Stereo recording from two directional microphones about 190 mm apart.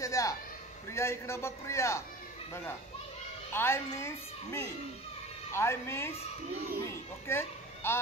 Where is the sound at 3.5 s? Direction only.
15° left (ahead or behind).